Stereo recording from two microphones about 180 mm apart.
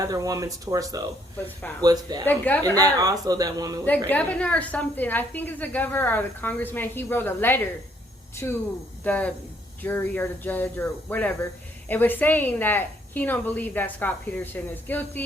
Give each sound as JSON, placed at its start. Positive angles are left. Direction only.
{"t": 0.0, "sound": "speech", "side_deg": -20}
{"t": 2.2, "sound": "a woman's voice", "side_deg": 10}
{"t": 2.7, "sound": "speech", "side_deg": -20}
{"t": 4.1, "sound": "a woman's voice", "side_deg": 10}
{"t": 9.0, "sound": "a woman's voice", "side_deg": 10}